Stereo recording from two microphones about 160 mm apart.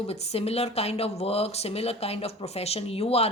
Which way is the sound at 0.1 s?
40° left (ahead or behind).